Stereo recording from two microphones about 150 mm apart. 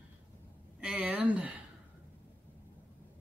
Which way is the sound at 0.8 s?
10° right (ahead or behind).